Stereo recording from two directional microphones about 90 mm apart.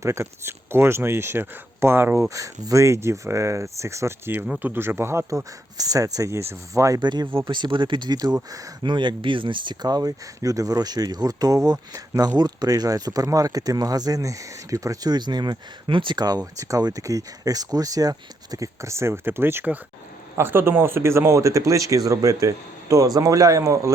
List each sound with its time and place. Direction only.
0.0 s speech: 35° right (ahead or behind)
2.3 s speech: 40° right (ahead or behind)
7.0 s speech: 55° right (ahead or behind)
8.8 s speech: 60° right (ahead or behind)
16.1 s speech: 45° right (ahead or behind)